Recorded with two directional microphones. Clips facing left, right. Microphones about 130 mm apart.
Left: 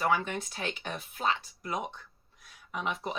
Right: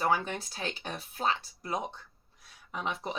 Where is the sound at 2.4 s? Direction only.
30° right (ahead or behind).